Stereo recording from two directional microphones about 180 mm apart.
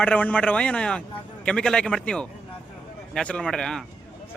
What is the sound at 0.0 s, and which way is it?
A man's voice, 5° left (ahead or behind).